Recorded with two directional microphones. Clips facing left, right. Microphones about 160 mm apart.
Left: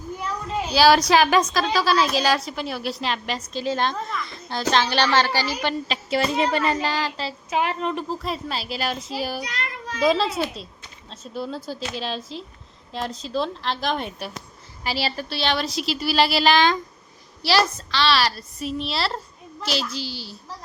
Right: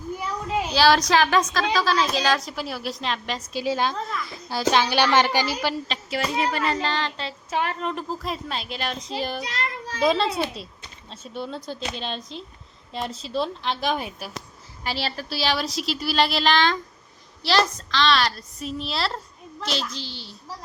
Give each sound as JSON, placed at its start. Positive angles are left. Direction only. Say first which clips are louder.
{"t": 0.7, "sound": "a woman's voice", "louder": "left 3 dB", "side_deg": 5}
{"t": 6.1, "sound": "a woman's voice", "louder": "left 4 dB", "side_deg": 25}
{"t": 9.4, "sound": "a child's voice", "louder": "right 1 dB", "side_deg": -25}
{"t": 10.0, "sound": "a woman's voice", "louder": "left 1 dB", "side_deg": 0}